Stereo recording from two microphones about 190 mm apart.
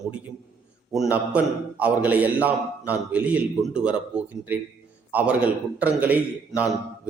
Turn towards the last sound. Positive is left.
turn(degrees=-10)  # may be behind; listen again after turning